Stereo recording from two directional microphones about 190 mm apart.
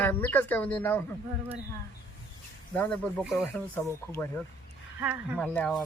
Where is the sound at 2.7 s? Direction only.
5° left (ahead or behind).